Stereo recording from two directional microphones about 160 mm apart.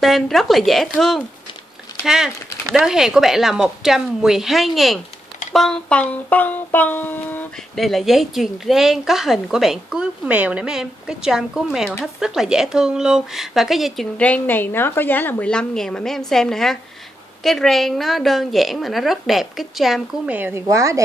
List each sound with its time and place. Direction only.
0.0 s speech: centre (ahead or behind)
7.8 s speech: centre (ahead or behind)
20.3 s a woman's voice: 10° right (ahead or behind)